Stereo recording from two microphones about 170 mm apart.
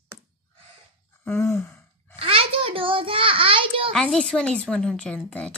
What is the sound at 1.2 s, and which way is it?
Sigh, 15° left (ahead or behind).